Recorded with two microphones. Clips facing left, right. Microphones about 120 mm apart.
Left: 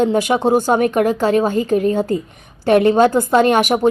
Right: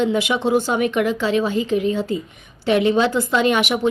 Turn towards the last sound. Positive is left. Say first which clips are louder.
# left 5 dB
turn(degrees=45)  # may be behind; listen again after turning